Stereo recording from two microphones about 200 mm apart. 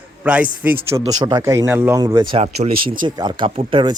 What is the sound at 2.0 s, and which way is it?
Speech, 20° right (ahead or behind).